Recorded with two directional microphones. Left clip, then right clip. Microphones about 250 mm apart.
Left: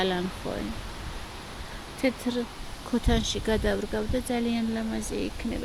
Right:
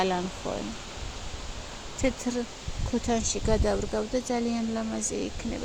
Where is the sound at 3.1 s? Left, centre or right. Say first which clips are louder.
Even; centre.